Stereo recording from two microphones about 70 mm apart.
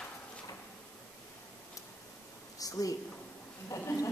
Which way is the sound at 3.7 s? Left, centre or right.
Left.